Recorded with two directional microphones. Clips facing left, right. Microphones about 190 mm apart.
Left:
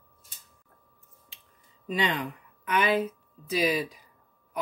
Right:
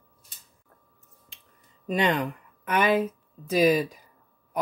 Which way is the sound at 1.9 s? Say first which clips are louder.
Right 4 dB; 45° right (ahead or behind).